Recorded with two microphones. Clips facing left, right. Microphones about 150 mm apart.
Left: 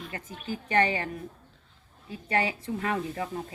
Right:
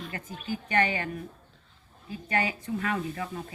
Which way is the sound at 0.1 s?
30° left (ahead or behind).